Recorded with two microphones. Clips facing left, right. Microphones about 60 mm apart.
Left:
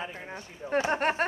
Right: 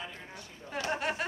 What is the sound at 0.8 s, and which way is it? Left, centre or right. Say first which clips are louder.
Speech: left 3 dB; left.